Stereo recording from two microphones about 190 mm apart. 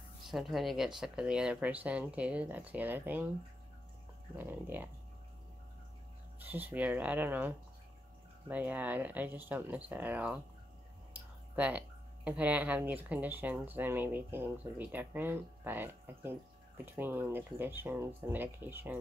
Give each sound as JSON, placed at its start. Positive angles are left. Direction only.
{"t": 0.2, "sound": "speech", "side_deg": 0}
{"t": 4.4, "sound": "speech", "side_deg": -10}
{"t": 6.4, "sound": "speech", "side_deg": -10}
{"t": 11.1, "sound": "a sound", "side_deg": -5}
{"t": 12.3, "sound": "speech", "side_deg": -10}